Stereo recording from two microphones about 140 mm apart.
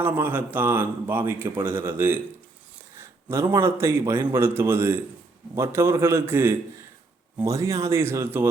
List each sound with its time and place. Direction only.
0.0 s a man's voice: 15° right (ahead or behind)